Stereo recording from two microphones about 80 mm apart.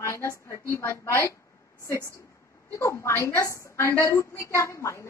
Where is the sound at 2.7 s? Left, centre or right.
Left.